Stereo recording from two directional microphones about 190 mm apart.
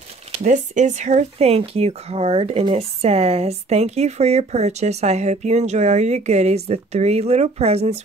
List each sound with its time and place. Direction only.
0.4 s speech: 40° right (ahead or behind)